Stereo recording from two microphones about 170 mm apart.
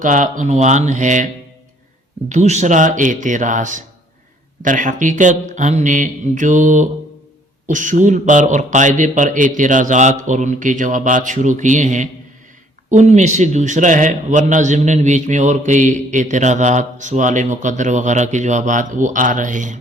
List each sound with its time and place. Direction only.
0.0 s a man's voice: 50° right (ahead or behind)
2.3 s a man's voice: 45° right (ahead or behind)